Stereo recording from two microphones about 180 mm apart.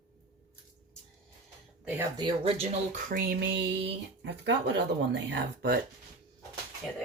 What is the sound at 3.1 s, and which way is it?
Speech, 60° right (ahead or behind).